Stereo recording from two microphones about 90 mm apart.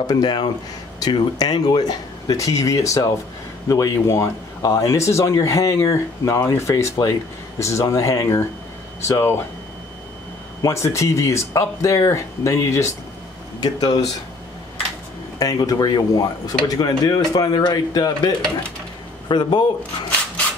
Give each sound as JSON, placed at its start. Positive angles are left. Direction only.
{"t": 0.0, "sound": "speech", "side_deg": 55}
{"t": 10.6, "sound": "speech", "side_deg": 35}
{"t": 13.6, "sound": "speech", "side_deg": 50}
{"t": 15.3, "sound": "speech", "side_deg": 45}
{"t": 19.2, "sound": "speech", "side_deg": 55}